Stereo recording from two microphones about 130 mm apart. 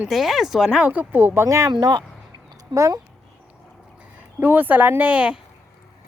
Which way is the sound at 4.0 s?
10° right (ahead or behind).